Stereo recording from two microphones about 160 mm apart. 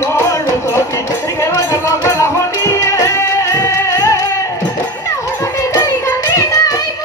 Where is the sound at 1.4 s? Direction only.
20° left (ahead or behind).